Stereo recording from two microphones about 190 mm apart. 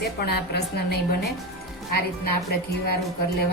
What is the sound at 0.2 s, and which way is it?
Speech, 60° left (ahead or behind).